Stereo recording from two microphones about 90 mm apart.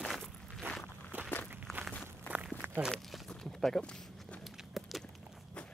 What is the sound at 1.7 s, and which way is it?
Walk, 5° left (ahead or behind).